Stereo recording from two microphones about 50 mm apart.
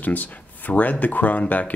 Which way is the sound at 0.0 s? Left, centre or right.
Left.